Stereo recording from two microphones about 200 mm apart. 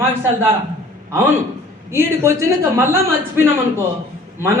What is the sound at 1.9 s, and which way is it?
A man's voice, 15° right (ahead or behind).